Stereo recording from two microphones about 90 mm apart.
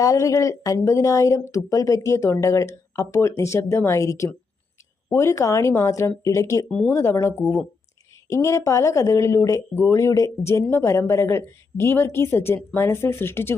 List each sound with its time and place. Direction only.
0.0 s speech: 40° left (ahead or behind)